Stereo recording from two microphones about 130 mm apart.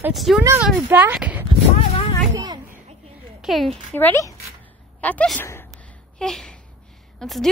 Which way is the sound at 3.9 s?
20° left (ahead or behind).